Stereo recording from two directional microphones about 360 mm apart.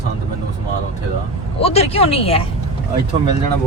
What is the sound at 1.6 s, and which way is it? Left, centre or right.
Speech, centre.